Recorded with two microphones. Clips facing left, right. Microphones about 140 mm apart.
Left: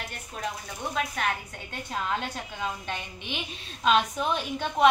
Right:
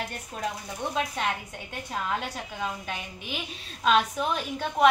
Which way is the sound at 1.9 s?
5° right (ahead or behind).